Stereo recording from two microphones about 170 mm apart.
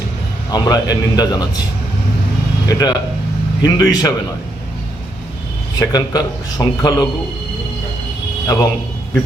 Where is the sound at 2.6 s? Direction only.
25° left (ahead or behind).